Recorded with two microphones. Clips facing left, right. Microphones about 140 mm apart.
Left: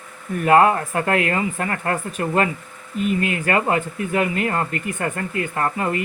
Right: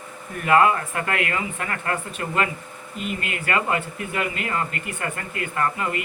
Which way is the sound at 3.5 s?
35° left (ahead or behind).